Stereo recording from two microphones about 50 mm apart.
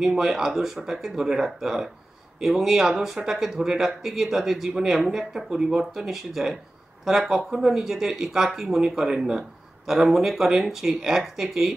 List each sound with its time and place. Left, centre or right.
0.1 s speech: centre
0.4 s speech: centre